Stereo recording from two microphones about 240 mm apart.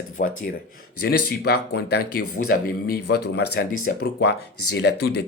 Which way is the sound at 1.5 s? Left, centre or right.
Left.